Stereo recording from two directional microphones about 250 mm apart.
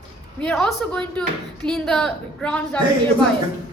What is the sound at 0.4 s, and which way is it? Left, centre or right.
A woman's voice, centre.